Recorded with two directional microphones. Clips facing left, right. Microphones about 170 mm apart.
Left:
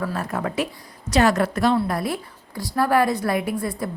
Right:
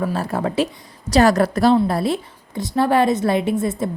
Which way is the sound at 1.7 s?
25° right (ahead or behind).